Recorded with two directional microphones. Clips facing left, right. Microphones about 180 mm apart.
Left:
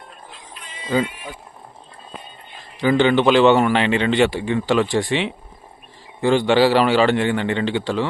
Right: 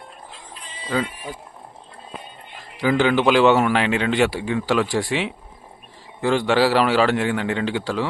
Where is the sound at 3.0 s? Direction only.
5° right (ahead or behind).